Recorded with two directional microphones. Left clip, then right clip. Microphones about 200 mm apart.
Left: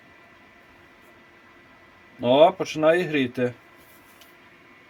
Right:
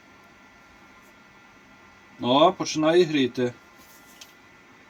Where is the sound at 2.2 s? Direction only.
35° left (ahead or behind).